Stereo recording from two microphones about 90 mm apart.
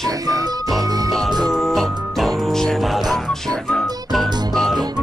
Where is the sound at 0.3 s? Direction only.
40° right (ahead or behind).